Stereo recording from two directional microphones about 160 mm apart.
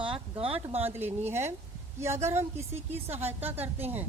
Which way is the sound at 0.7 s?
15° right (ahead or behind).